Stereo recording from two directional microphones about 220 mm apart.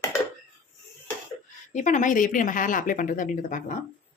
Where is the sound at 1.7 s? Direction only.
35° left (ahead or behind).